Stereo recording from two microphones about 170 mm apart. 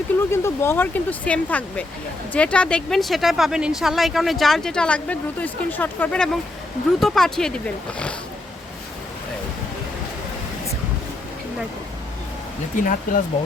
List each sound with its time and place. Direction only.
0.3 s speech: 15° left (ahead or behind)
12.7 s speech: 50° left (ahead or behind)